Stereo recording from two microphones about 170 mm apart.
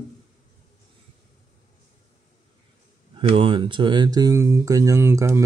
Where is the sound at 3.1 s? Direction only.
30° right (ahead or behind); by 5.4 s 15° right (ahead or behind).